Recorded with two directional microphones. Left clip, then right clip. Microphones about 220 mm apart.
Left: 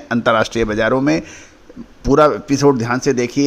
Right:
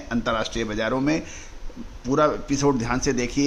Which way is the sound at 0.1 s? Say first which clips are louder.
Left 10 dB; 35° left (ahead or behind).